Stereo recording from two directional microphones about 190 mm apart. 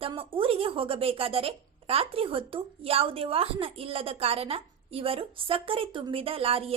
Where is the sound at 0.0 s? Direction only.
30° right (ahead or behind).